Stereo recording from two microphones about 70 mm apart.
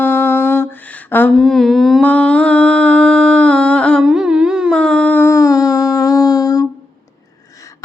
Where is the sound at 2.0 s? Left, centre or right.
Centre.